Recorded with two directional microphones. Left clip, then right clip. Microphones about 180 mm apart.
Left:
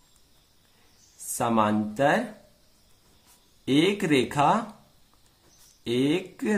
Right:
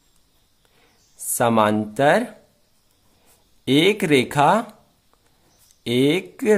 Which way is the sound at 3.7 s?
55° right (ahead or behind).